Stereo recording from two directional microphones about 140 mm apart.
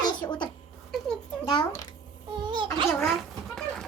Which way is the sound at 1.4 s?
30° left (ahead or behind).